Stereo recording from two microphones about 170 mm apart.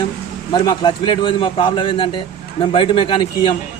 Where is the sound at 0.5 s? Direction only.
25° left (ahead or behind).